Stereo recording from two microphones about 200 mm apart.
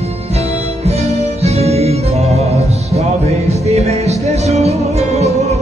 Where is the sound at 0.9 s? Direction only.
30° right (ahead or behind).